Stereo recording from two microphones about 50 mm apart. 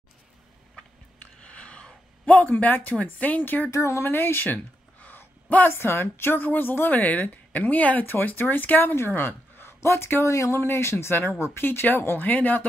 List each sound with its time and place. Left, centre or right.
1.4 s a sound: left
2.2 s a woman's voice: left
3.7 s speech: left
4.0 s speech: left
5.0 s a sound: left
5.7 s a woman's voice: left
9.8 s speech: left
10.2 s speech: left
11.6 s speech: left
12.2 s a woman's voice: left